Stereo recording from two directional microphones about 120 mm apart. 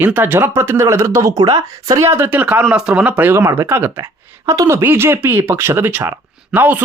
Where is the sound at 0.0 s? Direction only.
15° right (ahead or behind).